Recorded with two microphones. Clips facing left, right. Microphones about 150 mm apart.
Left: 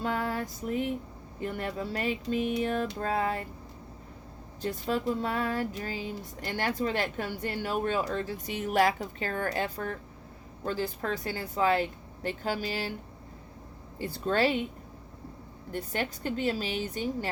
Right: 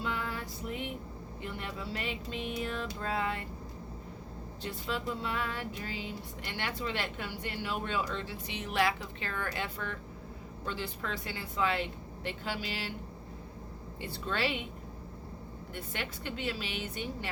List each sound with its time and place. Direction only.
0.0 s female singing: 45° left (ahead or behind)
1.4 s a woman's voice: 45° left (ahead or behind)
4.6 s speech: 40° left (ahead or behind)
14.0 s speech: 45° left (ahead or behind)
15.7 s a woman's voice: 40° left (ahead or behind)